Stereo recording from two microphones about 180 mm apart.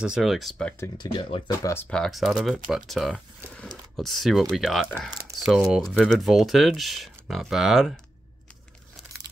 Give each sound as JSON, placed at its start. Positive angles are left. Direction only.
{"t": 0.0, "sound": "speech", "side_deg": 0}
{"t": 0.9, "sound": "speech", "side_deg": 25}
{"t": 1.7, "sound": "speech", "side_deg": 10}